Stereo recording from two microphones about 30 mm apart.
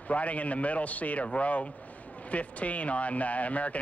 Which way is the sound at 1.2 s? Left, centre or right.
Left.